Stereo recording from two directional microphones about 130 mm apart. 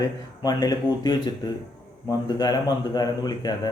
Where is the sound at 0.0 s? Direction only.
30° left (ahead or behind).